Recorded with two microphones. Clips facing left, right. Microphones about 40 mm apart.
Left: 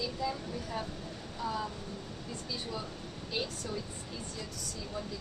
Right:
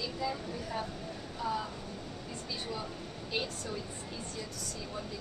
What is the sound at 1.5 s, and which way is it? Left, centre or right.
Speech, centre.